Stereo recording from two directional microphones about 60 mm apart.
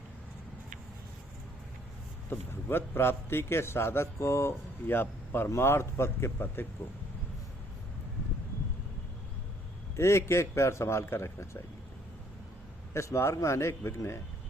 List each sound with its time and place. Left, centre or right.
2.3 s a man's voice: left
4.9 s a man's voice: left
9.9 s a man's voice: left
12.9 s a man's voice: left